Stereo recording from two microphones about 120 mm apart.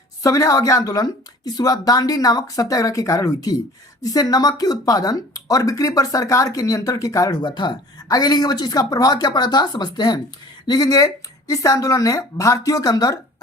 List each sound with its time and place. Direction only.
0.2 s speech: 30° left (ahead or behind)